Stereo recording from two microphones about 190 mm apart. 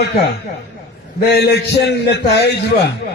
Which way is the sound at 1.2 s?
60° left (ahead or behind).